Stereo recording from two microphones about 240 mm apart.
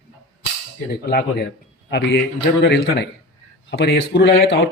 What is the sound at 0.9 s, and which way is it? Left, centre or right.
Speech, left.